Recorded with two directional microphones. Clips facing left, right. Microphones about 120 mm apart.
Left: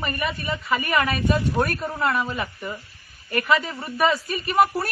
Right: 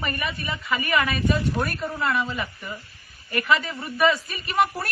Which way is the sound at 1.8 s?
45° left (ahead or behind).